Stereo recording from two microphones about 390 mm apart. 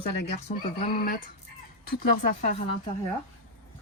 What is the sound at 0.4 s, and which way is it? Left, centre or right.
Speech, left.